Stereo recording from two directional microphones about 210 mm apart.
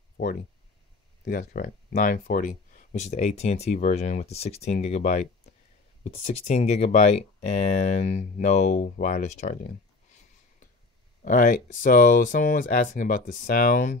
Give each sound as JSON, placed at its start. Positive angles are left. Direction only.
{"t": 1.2, "sound": "speech", "side_deg": 45}
{"t": 11.2, "sound": "speech", "side_deg": 40}